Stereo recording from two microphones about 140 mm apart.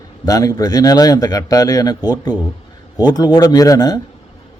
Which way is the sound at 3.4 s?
25° left (ahead or behind).